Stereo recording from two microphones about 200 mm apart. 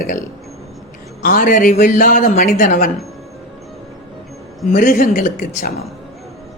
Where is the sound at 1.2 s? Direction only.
45° left (ahead or behind).